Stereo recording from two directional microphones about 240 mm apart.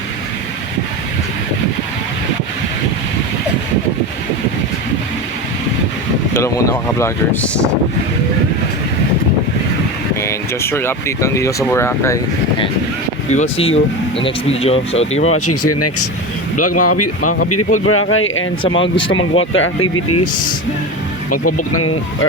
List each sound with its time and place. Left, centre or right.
6.3 s speech: centre
10.2 s speech: centre; by 15.4 s left
15.4 s speech: left
17.8 s speech: left
18.8 s speech: left
19.3 s speech: left